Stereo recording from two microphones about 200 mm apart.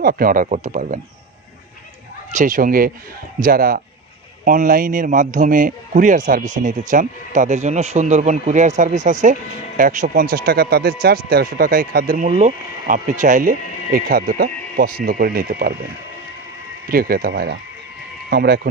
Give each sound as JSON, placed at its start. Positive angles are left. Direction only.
{"t": 0.0, "sound": "a man's voice", "side_deg": -45}
{"t": 2.3, "sound": "a man's voice", "side_deg": -40}
{"t": 16.9, "sound": "speech", "side_deg": -45}